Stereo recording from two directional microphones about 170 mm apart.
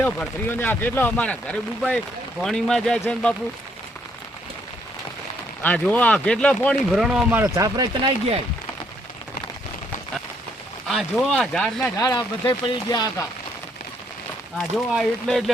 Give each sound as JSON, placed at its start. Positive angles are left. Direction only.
{"t": 0.0, "sound": "speech", "side_deg": 10}
{"t": 5.6, "sound": "speech", "side_deg": 10}
{"t": 10.8, "sound": "speech", "side_deg": 0}
{"t": 11.9, "sound": "speech", "side_deg": 20}
{"t": 14.6, "sound": "speech", "side_deg": 0}